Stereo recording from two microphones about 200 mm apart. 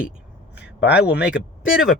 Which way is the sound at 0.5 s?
60° left (ahead or behind).